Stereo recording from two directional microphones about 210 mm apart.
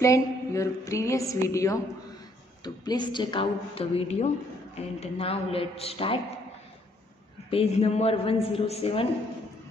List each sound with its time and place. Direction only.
0.0 s a woman's voice: 15° left (ahead or behind)
7.5 s a woman's voice: 30° left (ahead or behind)